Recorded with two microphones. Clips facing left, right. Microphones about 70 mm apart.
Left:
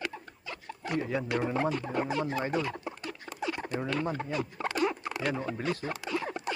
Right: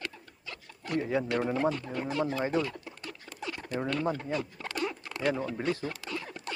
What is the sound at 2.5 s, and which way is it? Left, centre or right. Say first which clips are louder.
Speech: right 1 dB; centre.